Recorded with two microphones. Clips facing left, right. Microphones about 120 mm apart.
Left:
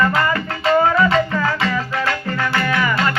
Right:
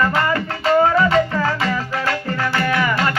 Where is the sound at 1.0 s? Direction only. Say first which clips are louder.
Even; 35° right (ahead or behind).